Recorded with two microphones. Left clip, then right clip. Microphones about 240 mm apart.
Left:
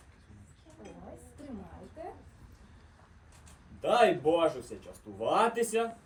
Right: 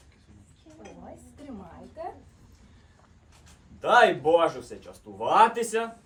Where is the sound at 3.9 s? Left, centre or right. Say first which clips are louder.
Right 6 dB; centre.